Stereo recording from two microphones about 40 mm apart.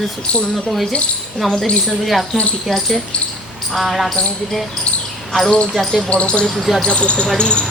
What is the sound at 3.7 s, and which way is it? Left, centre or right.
Speech, centre.